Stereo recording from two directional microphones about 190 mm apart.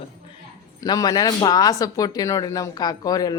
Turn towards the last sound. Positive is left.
turn(degrees=20)  # may be behind; listen again after turning